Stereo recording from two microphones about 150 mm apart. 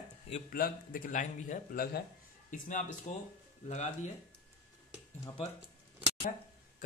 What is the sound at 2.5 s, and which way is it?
Speech, 55° left (ahead or behind).